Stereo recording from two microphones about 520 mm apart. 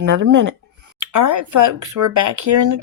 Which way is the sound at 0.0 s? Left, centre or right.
Right.